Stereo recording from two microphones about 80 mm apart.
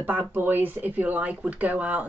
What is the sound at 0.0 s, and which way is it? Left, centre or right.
Speech, right.